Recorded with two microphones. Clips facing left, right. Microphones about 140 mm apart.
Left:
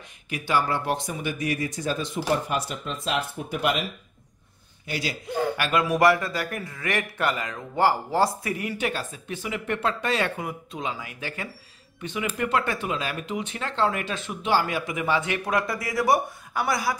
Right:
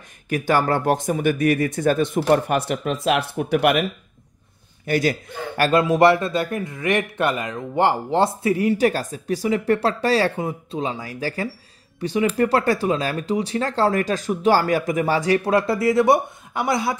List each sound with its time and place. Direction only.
0.3 s speech: 45° right (ahead or behind); by 3.8 s 70° right (ahead or behind)
4.8 s a man's voice: 50° right (ahead or behind)
5.6 s a man's voice: 35° right (ahead or behind)